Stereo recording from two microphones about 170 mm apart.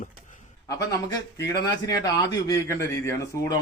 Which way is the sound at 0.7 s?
20° left (ahead or behind).